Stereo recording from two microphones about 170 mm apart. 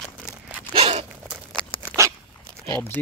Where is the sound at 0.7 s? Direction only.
35° right (ahead or behind).